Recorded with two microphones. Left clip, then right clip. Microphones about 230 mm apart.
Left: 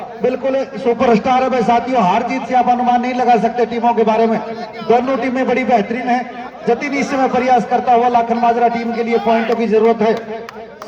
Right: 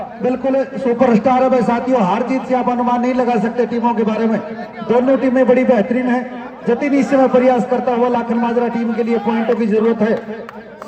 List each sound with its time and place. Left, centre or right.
0.3 s a man's voice: left